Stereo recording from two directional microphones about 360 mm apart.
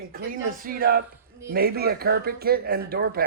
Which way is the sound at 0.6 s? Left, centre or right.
Right.